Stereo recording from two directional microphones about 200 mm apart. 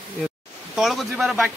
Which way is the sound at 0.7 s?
Centre (ahead or behind).